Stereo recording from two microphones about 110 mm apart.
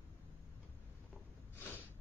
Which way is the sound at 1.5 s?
15° left (ahead or behind).